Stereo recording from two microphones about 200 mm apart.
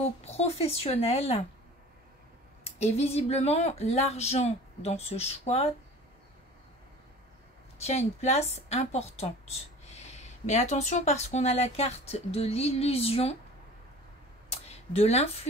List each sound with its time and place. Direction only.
0.2 s a woman's voice: 30° left (ahead or behind)
2.6 s a woman's voice: 30° left (ahead or behind)
7.8 s a woman's voice: 35° left (ahead or behind)
14.5 s a sound: 30° left (ahead or behind)